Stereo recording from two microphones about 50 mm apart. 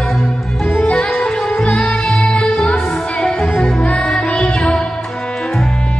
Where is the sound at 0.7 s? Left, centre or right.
Left.